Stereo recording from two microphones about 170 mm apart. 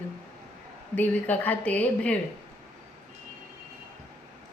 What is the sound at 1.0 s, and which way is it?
Speech, 10° left (ahead or behind).